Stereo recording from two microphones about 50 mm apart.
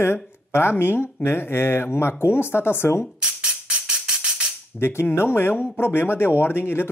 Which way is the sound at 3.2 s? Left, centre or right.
Centre.